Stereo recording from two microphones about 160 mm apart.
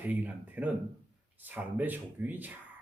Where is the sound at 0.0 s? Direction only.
10° right (ahead or behind).